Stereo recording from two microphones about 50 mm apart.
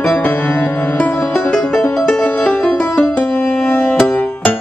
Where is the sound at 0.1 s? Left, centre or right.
Left.